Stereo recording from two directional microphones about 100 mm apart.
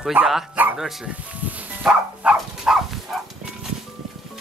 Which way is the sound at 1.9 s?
5° right (ahead or behind).